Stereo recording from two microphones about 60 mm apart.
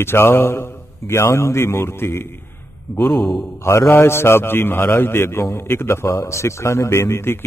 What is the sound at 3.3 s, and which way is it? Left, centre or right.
A man's voice, left.